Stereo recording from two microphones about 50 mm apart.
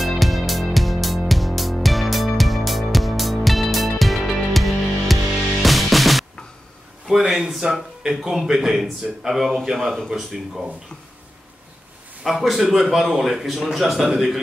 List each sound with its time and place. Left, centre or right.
0.0 s music: centre
7.1 s a man's voice: centre
9.8 s speech: centre
10.1 s speech: centre
12.3 s speech: centre